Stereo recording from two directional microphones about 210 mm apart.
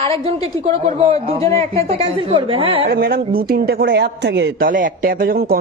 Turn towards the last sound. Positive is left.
turn(degrees=-45)  # may be behind; listen again after turning